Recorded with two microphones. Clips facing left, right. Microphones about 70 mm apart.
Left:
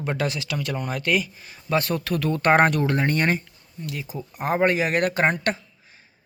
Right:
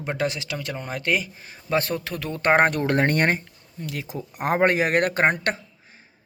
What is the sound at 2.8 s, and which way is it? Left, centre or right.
Speech, right.